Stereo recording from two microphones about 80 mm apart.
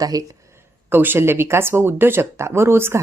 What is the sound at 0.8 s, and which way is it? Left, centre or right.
Speech, right.